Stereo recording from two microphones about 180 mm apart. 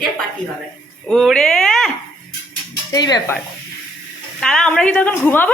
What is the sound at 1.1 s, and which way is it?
Speech, centre (ahead or behind).